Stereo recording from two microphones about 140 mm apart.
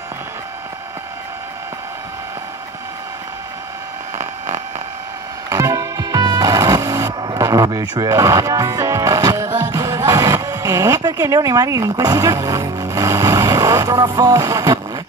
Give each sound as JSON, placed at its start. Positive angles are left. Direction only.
{"t": 5.5, "sound": "music", "side_deg": -25}
{"t": 9.7, "sound": "speech", "side_deg": -25}